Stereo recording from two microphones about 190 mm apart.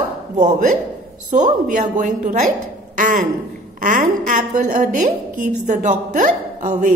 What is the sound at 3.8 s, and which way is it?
Speech, 40° right (ahead or behind).